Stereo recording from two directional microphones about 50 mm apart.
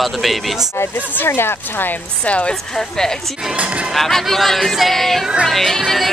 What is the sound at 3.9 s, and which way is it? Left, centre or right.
Speech, centre.